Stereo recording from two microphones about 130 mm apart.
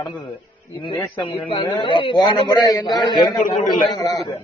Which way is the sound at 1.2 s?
45° left (ahead or behind).